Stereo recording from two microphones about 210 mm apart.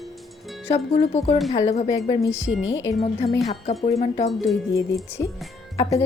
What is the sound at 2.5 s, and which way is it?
Speech, 65° left (ahead or behind).